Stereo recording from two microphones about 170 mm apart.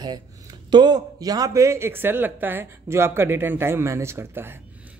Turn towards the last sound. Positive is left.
turn(degrees=-15)  # may be behind; listen again after turning